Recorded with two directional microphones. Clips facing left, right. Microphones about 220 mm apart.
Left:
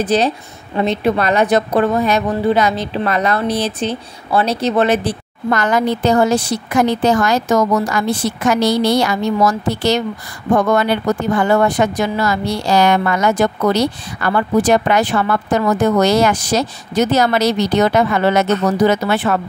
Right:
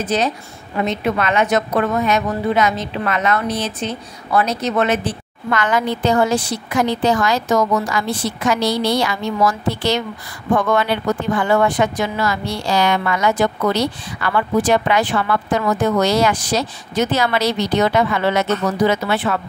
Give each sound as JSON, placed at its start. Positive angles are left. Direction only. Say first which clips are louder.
{"t": 0.0, "sound": "a woman's voice", "louder": "left 4 dB", "side_deg": 35}